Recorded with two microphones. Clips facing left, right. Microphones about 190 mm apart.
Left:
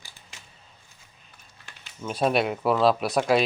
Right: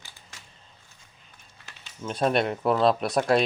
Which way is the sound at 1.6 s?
5° left (ahead or behind).